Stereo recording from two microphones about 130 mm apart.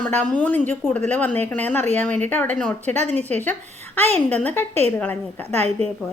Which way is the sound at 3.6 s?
55° right (ahead or behind).